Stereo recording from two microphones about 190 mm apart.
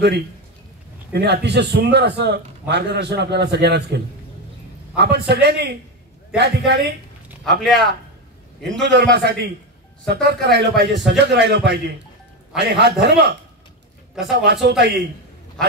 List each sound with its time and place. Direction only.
1.1 s a man's voice: 60° right (ahead or behind)
7.6 s a man's voice: centre (ahead or behind)
8.8 s a man's voice: 65° right (ahead or behind)